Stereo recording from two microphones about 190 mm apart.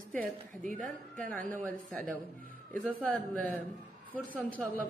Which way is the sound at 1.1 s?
10° left (ahead or behind).